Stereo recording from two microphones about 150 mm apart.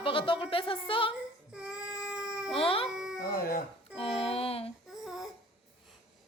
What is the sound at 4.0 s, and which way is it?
Music, 40° left (ahead or behind).